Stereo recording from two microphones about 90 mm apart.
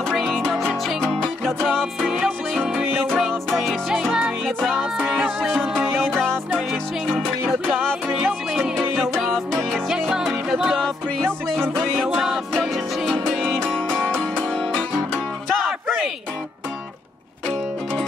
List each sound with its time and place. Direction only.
0.1 s music: centre (ahead or behind)
2.6 s music: 15° right (ahead or behind)
3.4 s music: 5° left (ahead or behind)
7.4 s music: 15° right (ahead or behind)
8.9 s music: centre (ahead or behind)